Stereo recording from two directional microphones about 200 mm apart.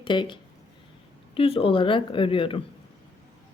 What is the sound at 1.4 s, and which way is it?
Speech, 30° left (ahead or behind).